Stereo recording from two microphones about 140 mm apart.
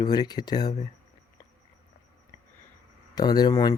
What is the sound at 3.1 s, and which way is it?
Speech, 30° left (ahead or behind).